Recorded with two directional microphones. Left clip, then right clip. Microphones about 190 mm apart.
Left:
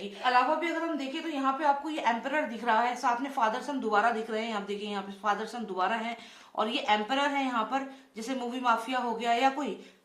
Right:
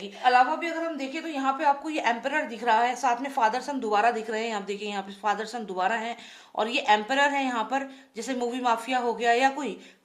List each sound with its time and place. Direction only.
0.2 s a woman's voice: 45° right (ahead or behind)